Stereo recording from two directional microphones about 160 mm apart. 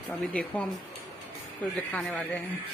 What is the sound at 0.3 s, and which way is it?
Speech, 10° left (ahead or behind).